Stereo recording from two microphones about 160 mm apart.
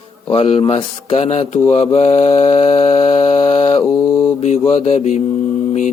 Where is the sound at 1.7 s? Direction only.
40° left (ahead or behind).